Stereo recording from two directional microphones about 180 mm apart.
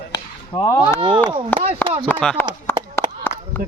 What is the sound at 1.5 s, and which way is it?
Speech, 10° left (ahead or behind).